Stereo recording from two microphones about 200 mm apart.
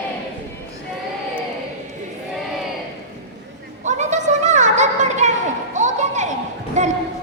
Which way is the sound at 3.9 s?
35° right (ahead or behind).